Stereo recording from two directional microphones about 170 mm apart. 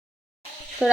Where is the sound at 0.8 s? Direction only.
5° right (ahead or behind).